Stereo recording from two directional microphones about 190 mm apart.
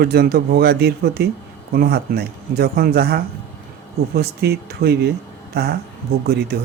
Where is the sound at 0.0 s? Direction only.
55° right (ahead or behind).